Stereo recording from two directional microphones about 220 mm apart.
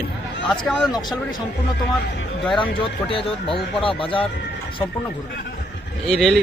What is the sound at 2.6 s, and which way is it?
Speech, 25° left (ahead or behind).